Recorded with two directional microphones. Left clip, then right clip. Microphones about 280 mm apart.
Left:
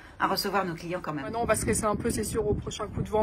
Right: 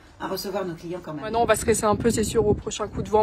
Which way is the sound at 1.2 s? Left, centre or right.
Right.